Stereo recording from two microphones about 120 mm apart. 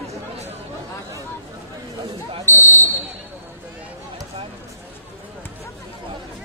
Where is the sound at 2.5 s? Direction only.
15° left (ahead or behind).